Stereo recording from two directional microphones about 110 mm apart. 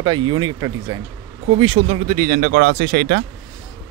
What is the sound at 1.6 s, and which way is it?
Speech, 60° right (ahead or behind).